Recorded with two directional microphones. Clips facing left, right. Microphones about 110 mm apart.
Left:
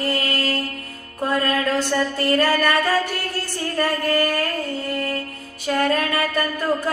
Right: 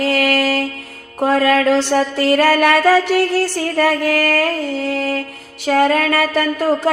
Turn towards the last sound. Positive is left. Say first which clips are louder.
# right 6 dB
turn(degrees=-90)